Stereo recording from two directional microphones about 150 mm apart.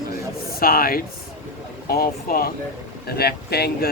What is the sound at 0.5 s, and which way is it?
A man's voice, 80° left.